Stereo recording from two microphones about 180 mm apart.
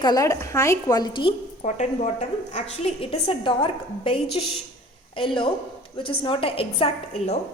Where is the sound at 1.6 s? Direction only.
40° left (ahead or behind).